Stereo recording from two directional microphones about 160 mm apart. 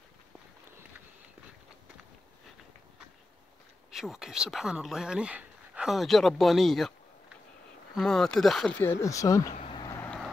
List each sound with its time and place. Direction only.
3.9 s speech: centre (ahead or behind)
7.9 s speech: 5° left (ahead or behind); by 9.5 s 20° left (ahead or behind)
9.7 s vehicle: 30° left (ahead or behind)
9.9 s vehicle: 10° left (ahead or behind)